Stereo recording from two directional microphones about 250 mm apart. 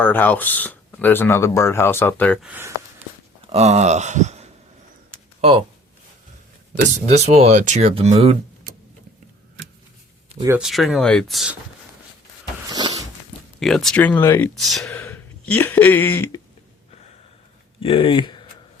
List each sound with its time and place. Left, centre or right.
0.0 s speech: centre
2.5 s speech: centre
3.5 s speech: right
6.7 s speech: right
10.4 s speech: centre
12.7 s walk: centre
13.6 s speech: centre
17.7 s speech: left